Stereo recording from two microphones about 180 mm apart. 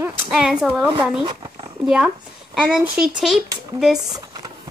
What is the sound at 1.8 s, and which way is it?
Speech, 5° right (ahead or behind).